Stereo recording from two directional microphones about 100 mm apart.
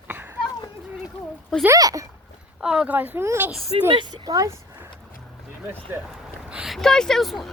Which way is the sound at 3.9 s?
50° right (ahead or behind).